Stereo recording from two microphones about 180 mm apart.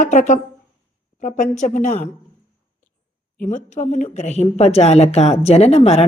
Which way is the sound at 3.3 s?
45° left (ahead or behind).